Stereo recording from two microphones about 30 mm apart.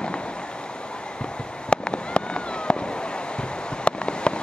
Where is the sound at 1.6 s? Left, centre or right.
Left.